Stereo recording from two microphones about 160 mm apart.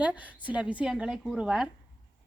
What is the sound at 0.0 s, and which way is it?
A woman's voice, 10° right (ahead or behind).